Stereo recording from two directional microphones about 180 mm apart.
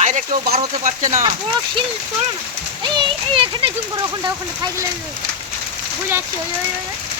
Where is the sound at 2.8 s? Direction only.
25° right (ahead or behind).